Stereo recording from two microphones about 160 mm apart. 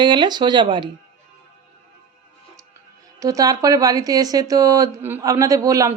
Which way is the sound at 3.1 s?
20° right (ahead or behind).